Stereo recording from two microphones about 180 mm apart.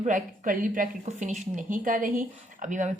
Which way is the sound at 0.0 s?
45° right (ahead or behind).